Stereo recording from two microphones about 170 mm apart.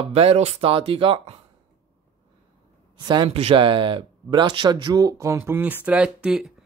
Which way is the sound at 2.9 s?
25° right (ahead or behind).